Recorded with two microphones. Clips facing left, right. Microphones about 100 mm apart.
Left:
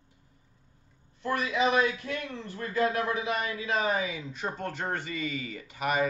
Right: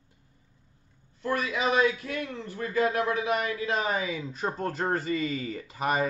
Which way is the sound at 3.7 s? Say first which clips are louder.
Left 3 dB; 30° right (ahead or behind).